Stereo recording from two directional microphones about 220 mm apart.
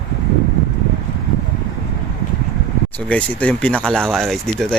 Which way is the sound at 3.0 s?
5° left (ahead or behind).